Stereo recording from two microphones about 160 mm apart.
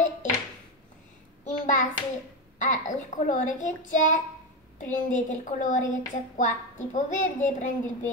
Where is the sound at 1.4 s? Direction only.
50° left (ahead or behind).